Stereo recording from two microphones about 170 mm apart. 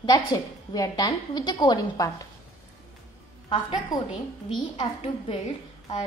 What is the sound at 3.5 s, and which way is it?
Speech, 30° left (ahead or behind).